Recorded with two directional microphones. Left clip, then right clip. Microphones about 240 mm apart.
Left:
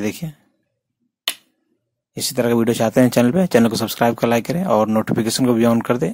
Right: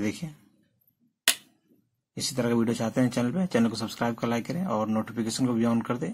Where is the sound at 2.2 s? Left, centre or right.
Left.